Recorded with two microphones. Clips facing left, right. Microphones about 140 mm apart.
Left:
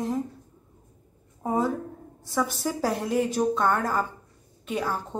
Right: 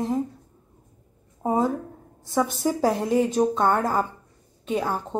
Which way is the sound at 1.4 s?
20° right (ahead or behind).